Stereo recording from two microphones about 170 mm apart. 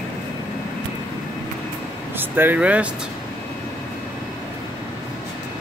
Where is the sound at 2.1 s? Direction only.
10° right (ahead or behind).